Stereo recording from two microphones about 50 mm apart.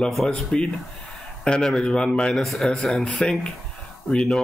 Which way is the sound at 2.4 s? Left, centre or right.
Centre.